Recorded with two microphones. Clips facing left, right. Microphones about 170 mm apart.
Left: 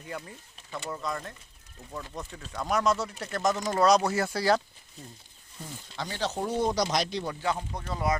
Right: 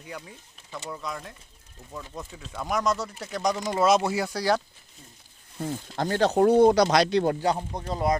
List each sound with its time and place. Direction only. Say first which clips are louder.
0.0 s speech: left 1 dB; centre (ahead or behind)
5.5 s speech: right 9 dB; 60° right (ahead or behind)
7.7 s speech: right 4 dB; 30° right (ahead or behind)